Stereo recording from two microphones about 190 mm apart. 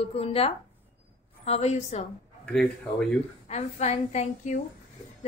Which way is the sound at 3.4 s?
35° left (ahead or behind).